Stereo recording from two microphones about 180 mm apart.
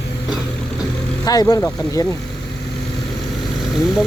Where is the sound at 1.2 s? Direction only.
20° left (ahead or behind).